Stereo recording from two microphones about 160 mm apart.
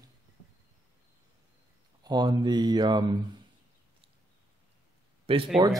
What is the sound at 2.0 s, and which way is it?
Mantra, 25° right (ahead or behind).